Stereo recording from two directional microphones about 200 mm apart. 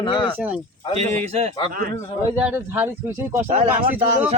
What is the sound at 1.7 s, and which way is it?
Speech, 45° right (ahead or behind).